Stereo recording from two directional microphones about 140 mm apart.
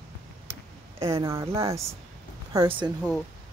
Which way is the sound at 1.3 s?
20° right (ahead or behind).